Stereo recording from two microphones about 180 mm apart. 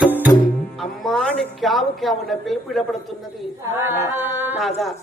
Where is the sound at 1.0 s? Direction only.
5° left (ahead or behind).